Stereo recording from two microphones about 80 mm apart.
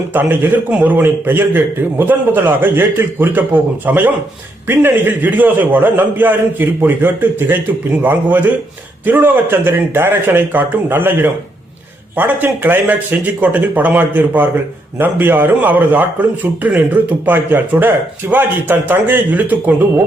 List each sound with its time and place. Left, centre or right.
0.1 s a man's voice: right